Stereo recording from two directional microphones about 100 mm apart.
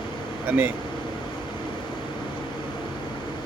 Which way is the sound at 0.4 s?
20° right (ahead or behind).